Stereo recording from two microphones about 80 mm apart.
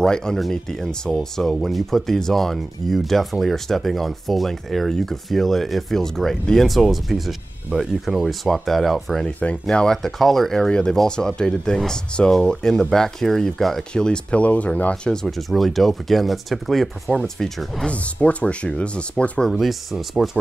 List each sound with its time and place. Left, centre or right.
0.0 s speech: centre
9.4 s speech: centre
15.2 s speech: centre
17.8 s speech: centre
19.5 s speech: centre